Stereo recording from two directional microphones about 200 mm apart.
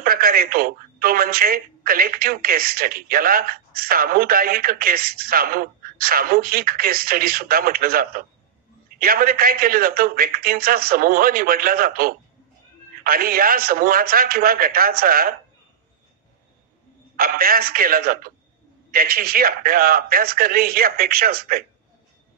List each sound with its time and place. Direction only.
0.0 s speech: 45° right (ahead or behind)
17.2 s speech: 45° right (ahead or behind)